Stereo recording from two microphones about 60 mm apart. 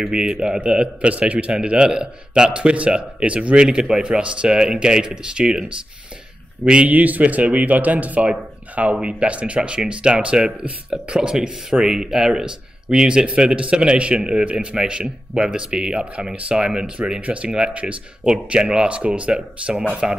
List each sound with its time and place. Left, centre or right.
0.0 s speech: centre